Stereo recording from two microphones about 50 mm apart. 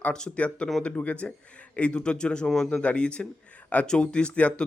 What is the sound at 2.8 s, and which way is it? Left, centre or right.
Speech, left.